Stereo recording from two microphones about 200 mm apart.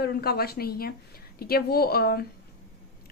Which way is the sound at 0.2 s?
50° left (ahead or behind).